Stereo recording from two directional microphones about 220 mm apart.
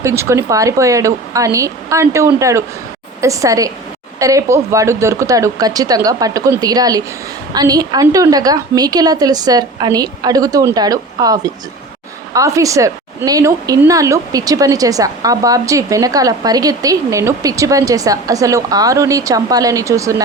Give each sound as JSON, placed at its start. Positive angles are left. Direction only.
{"t": 0.0, "sound": "speech", "side_deg": -10}